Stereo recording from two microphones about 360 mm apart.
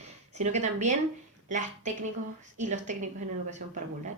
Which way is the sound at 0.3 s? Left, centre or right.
Centre.